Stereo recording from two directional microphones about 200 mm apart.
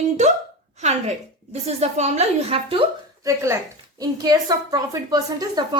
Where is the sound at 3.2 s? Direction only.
15° right (ahead or behind).